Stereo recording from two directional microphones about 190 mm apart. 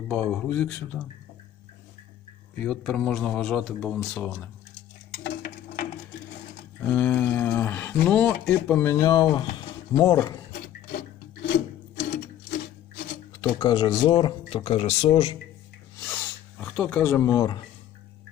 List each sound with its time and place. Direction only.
0.1 s a man's voice: 5° left (ahead or behind)
2.6 s a man's voice: 5° left (ahead or behind)
5.2 s a sound: 55° left (ahead or behind)
6.8 s speech: 10° left (ahead or behind)
13.3 s speech: 20° left (ahead or behind)
16.0 s a sound: 10° left (ahead or behind)